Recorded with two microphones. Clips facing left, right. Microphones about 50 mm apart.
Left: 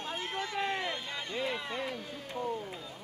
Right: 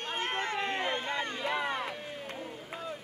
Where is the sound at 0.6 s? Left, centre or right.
Right.